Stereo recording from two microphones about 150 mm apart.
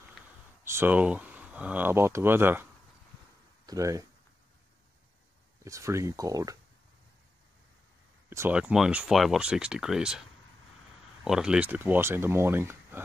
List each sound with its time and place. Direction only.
0.2 s a sound: centre (ahead or behind)
0.7 s speech: 15° right (ahead or behind)
5.6 s speech: 20° right (ahead or behind)
8.3 s speech: 15° right (ahead or behind)
11.2 s speech: 5° right (ahead or behind)